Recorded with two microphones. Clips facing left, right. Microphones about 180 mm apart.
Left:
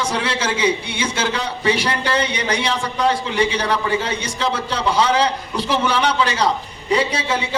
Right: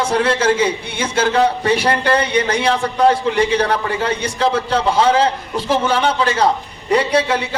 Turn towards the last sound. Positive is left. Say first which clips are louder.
# right 5 dB
turn(degrees=-60)  # may be behind; listen again after turning